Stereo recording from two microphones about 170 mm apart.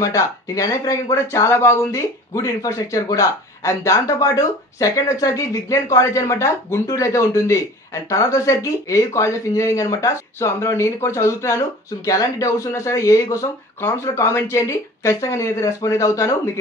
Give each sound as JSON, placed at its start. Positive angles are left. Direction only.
{"t": 0.0, "sound": "speech", "side_deg": 20}